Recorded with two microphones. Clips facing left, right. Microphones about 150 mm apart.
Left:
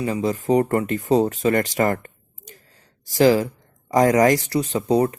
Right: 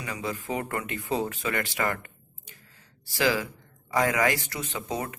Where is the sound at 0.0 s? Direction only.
35° left (ahead or behind).